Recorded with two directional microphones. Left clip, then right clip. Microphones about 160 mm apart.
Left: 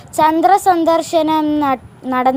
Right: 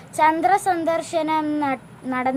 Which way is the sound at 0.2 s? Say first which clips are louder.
Left 6 dB; 30° left (ahead or behind).